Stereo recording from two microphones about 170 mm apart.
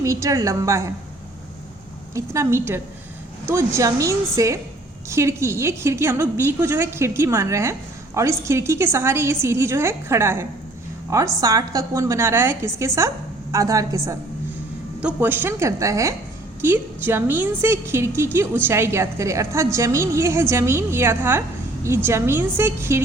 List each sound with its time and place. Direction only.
0.0 s a woman's voice: 20° right (ahead or behind)
2.1 s a woman's voice: 15° right (ahead or behind)